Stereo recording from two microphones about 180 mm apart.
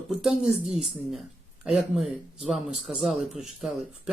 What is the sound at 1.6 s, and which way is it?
Speech, centre (ahead or behind).